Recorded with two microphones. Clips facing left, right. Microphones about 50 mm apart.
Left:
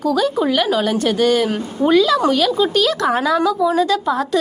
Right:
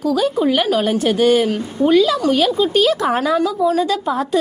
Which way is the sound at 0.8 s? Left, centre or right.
Centre.